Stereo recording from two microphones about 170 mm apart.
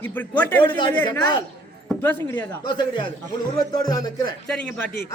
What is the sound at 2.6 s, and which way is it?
Speech, 25° left (ahead or behind).